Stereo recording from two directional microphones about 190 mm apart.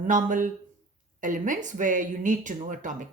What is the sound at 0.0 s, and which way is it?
Speech, 45° right (ahead or behind).